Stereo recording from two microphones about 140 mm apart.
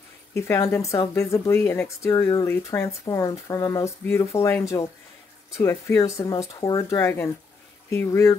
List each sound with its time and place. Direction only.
0.5 s speech: 20° left (ahead or behind)